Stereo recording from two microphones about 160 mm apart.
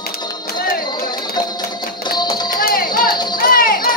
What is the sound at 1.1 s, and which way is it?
Music, 25° left (ahead or behind).